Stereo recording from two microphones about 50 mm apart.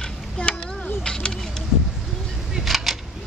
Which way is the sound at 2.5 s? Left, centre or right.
Centre.